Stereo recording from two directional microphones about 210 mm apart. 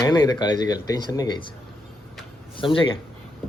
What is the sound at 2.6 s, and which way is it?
Speech, 25° left (ahead or behind).